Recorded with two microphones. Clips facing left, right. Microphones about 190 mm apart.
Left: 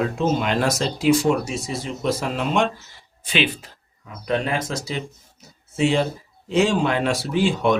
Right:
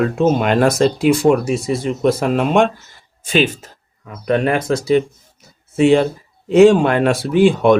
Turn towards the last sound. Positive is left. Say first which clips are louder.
# right 8 dB
turn(degrees=-55)  # may be behind; listen again after turning